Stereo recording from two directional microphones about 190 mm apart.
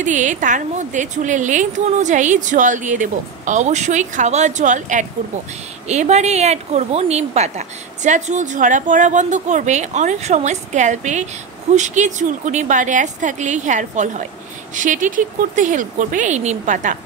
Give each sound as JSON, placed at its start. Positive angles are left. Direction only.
{"t": 0.0, "sound": "a woman's voice", "side_deg": -40}